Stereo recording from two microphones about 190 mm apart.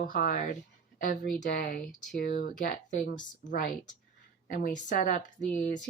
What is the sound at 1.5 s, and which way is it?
Speech, 45° left (ahead or behind).